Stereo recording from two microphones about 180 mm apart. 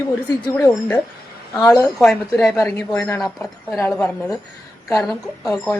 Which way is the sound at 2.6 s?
15° left (ahead or behind).